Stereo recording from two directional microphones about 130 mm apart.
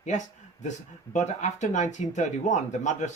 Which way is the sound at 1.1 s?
65° left (ahead or behind).